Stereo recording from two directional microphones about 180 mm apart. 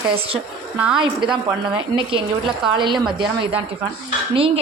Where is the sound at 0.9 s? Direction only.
25° right (ahead or behind).